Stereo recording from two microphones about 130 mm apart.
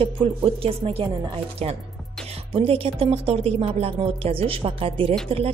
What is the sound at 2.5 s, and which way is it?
A woman's voice, 45° right (ahead or behind).